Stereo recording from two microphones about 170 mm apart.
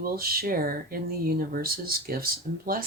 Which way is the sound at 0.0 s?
60° right (ahead or behind).